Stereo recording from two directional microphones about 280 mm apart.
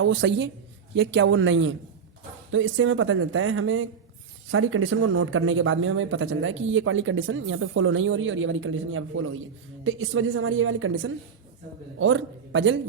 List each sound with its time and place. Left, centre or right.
0.0 s a man's voice: right